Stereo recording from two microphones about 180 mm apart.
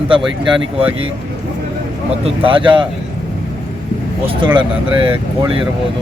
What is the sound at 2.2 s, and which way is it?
Speech, 30° right (ahead or behind).